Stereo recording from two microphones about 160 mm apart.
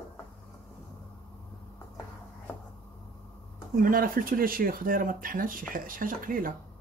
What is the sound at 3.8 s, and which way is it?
Speech, 60° right (ahead or behind).